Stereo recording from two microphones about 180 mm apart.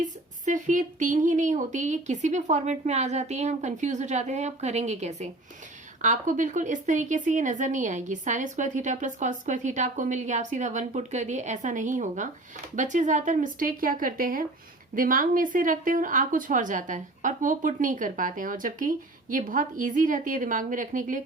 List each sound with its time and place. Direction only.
0.0 s a woman's voice: 45° right (ahead or behind)